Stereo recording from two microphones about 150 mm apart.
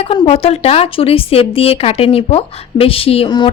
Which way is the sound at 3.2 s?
30° left (ahead or behind).